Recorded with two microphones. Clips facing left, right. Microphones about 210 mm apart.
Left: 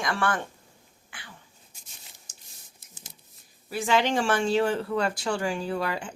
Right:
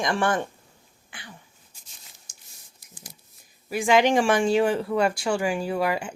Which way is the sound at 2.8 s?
25° left (ahead or behind).